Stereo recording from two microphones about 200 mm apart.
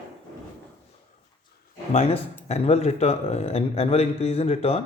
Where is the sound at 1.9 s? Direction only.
35° left (ahead or behind).